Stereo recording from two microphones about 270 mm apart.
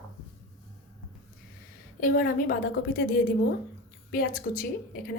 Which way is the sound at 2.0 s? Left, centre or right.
Left.